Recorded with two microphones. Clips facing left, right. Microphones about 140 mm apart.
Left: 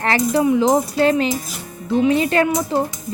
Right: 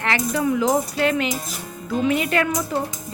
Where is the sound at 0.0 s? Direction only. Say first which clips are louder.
Left 5 dB; 35° left (ahead or behind).